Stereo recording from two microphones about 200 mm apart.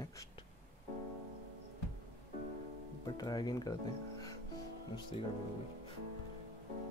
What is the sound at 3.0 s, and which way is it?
Speech, 20° left (ahead or behind).